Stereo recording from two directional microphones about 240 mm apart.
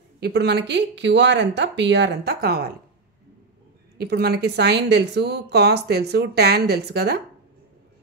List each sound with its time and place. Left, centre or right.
0.2 s a woman's voice: right
4.0 s a woman's voice: right